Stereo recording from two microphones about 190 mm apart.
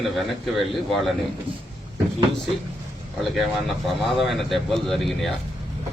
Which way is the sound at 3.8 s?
Centre (ahead or behind).